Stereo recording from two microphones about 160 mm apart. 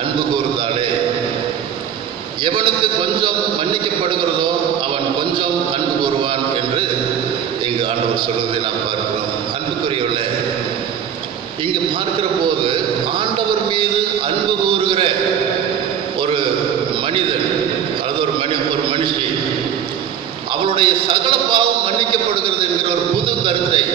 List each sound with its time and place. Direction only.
2.4 s a man's voice: 30° right (ahead or behind)
18.5 s a man's voice: 30° right (ahead or behind)
20.6 s a man's voice: 30° right (ahead or behind)